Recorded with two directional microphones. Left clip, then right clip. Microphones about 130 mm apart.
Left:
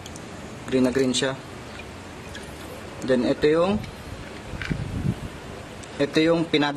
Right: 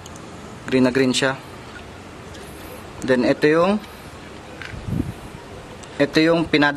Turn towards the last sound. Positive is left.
turn(degrees=-20)  # may be behind; listen again after turning